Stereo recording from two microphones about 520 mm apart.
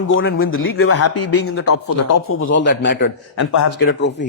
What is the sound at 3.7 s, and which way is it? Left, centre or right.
Speech, centre.